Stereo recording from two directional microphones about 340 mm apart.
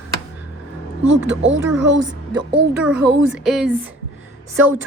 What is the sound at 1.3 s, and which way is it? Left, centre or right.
Speech, right.